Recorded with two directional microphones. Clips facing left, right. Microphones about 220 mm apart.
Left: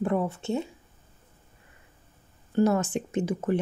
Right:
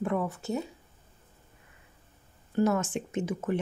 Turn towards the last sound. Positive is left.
turn(degrees=35)  # may be behind; listen again after turning